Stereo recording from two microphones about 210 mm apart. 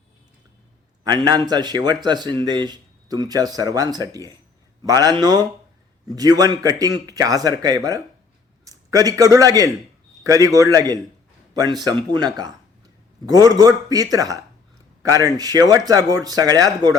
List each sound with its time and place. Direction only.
1.0 s a man's voice: 20° right (ahead or behind)